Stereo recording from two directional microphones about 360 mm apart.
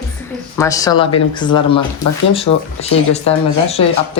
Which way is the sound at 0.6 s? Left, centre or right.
Centre.